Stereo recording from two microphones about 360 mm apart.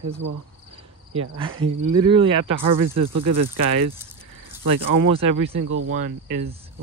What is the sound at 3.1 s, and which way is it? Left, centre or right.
Speech, right.